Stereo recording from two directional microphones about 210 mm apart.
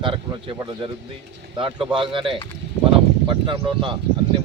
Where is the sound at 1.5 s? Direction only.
25° right (ahead or behind).